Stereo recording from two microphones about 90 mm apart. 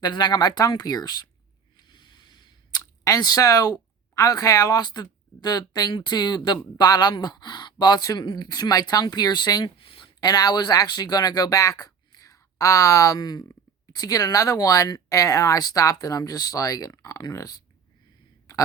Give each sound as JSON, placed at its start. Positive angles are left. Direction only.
{"t": 0.0, "sound": "speech", "side_deg": 55}
{"t": 1.9, "sound": "a sound", "side_deg": 60}
{"t": 3.0, "sound": "speech", "side_deg": 45}
{"t": 9.7, "sound": "speech", "side_deg": 75}